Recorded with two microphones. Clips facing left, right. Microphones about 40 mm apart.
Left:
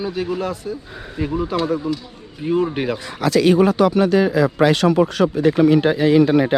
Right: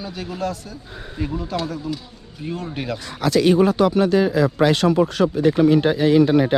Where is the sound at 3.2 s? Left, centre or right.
Left.